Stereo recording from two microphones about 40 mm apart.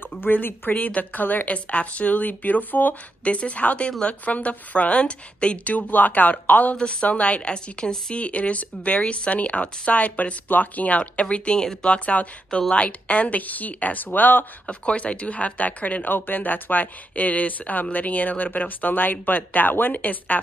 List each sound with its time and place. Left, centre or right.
0.2 s a woman's voice: left
3.3 s a woman's voice: left
6.8 s a woman's voice: left
10.0 s a woman's voice: left
11.0 s a woman's voice: left
14.7 s a woman's voice: left